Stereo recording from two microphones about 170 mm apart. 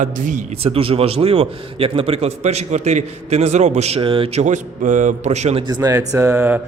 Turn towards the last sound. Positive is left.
turn(degrees=-10)  # may be behind; listen again after turning